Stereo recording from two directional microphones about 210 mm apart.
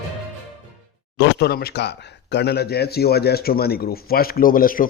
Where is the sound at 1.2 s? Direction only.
50° left (ahead or behind).